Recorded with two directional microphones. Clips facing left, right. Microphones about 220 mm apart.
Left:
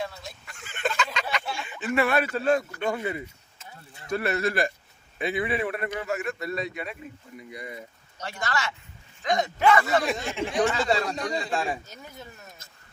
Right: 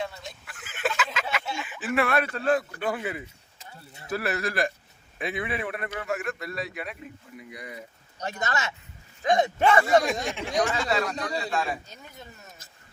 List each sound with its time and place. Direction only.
0.0 s a sound: 5° right (ahead or behind)
2.8 s speech: 5° right (ahead or behind)
8.2 s speech: 20° right (ahead or behind)
10.8 s a man's voice: 30° left (ahead or behind)